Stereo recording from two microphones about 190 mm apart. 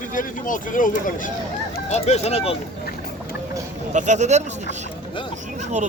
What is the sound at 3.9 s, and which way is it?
Speech, 40° right (ahead or behind).